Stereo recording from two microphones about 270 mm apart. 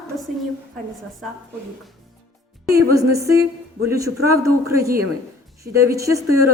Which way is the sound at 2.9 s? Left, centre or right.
Centre.